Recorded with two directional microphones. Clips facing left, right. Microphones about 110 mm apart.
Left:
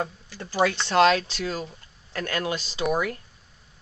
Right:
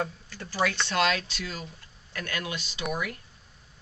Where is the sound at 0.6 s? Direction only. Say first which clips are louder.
Left 6 dB; 30° left (ahead or behind).